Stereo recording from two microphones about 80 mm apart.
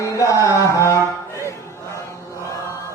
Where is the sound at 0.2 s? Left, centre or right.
Left.